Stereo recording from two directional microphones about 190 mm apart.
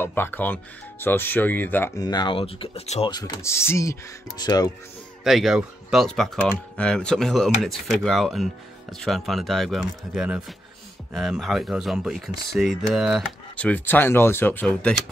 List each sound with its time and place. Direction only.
0.0 s speech: 10° left (ahead or behind)
5.2 s speech: centre (ahead or behind)